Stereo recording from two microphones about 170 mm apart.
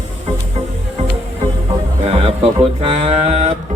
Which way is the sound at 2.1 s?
35° right (ahead or behind).